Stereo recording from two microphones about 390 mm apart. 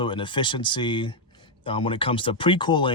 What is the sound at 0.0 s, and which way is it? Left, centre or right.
Speech, centre.